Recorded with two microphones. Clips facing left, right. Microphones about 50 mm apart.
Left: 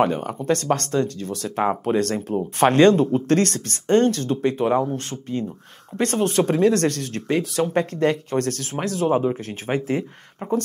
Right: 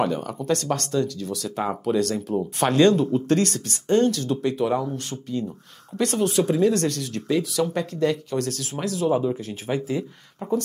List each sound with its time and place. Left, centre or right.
0.0 s speech: left